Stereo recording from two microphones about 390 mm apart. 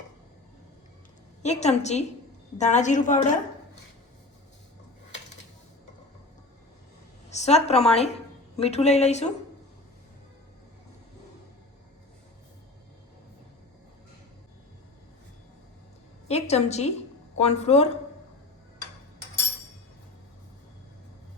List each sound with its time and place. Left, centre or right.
1.4 s a woman's voice: centre
7.3 s a woman's voice: centre
16.3 s a woman's voice: centre